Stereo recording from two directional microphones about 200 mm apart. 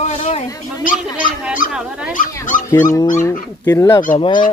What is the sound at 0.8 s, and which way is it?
Speech, 40° left (ahead or behind).